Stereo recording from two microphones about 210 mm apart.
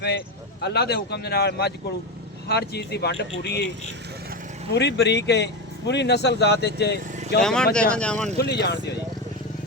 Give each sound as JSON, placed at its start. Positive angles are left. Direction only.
{"t": 0.6, "sound": "speech", "side_deg": 50}
{"t": 4.7, "sound": "speech", "side_deg": 55}
{"t": 7.3, "sound": "speech", "side_deg": 5}
{"t": 8.4, "sound": "speech", "side_deg": 50}